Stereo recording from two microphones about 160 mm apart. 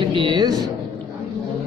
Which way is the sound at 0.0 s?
30° right (ahead or behind).